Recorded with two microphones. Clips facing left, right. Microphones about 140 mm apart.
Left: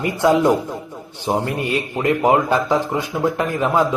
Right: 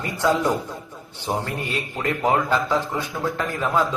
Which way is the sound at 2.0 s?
20° left (ahead or behind).